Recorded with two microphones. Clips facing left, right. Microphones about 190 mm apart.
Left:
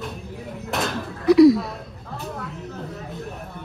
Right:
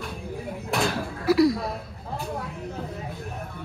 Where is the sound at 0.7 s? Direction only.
Centre (ahead or behind).